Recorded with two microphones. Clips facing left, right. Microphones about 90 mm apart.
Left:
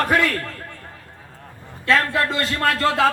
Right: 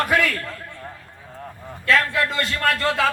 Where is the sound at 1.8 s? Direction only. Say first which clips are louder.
Left 1 dB; 30° left (ahead or behind).